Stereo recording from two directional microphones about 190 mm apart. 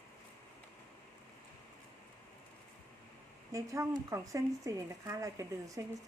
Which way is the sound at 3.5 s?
15° right (ahead or behind).